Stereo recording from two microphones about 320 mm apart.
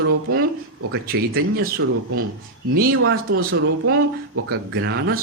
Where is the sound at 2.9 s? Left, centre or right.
Right.